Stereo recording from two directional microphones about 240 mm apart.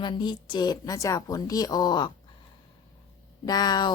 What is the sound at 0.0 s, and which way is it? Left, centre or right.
A woman's voice, centre.